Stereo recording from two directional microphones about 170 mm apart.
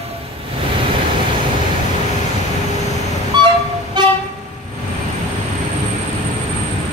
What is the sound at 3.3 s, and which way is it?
Train, 25° right (ahead or behind).